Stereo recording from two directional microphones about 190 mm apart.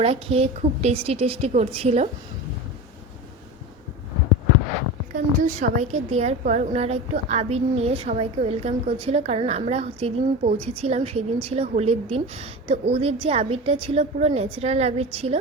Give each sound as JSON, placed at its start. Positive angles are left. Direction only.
{"t": 0.0, "sound": "a woman's voice", "side_deg": -30}
{"t": 5.1, "sound": "a woman's voice", "side_deg": -40}